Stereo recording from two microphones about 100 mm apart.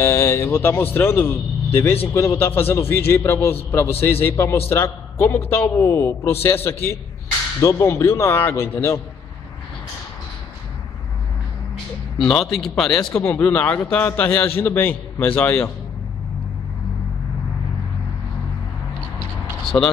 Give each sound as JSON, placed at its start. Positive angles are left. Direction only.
{"t": 0.0, "sound": "speech", "side_deg": 25}
{"t": 12.2, "sound": "speech", "side_deg": 5}
{"t": 13.2, "sound": "speech", "side_deg": 20}